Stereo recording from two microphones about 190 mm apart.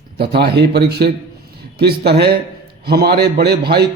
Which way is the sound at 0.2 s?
60° right (ahead or behind).